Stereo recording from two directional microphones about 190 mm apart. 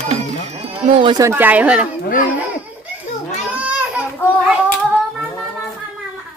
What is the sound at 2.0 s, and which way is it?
Speech, 45° left (ahead or behind).